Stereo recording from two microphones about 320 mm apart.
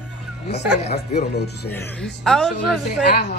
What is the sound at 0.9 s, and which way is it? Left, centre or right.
Speech, left.